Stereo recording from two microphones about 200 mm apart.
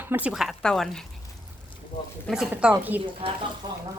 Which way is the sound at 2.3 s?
5° right (ahead or behind).